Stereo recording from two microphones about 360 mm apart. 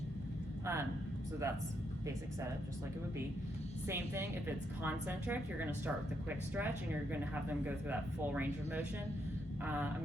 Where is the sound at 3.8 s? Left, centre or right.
Centre.